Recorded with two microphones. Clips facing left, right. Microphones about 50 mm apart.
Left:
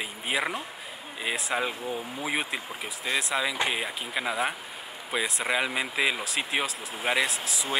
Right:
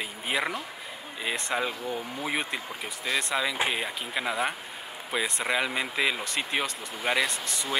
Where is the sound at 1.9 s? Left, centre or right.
Right.